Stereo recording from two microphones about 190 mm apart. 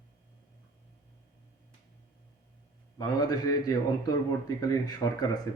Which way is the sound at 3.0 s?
20° left (ahead or behind).